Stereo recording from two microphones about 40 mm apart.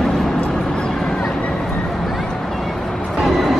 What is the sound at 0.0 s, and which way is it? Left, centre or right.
Vehicle, centre.